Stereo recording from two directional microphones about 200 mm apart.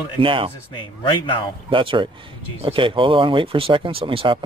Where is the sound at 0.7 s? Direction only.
25° left (ahead or behind).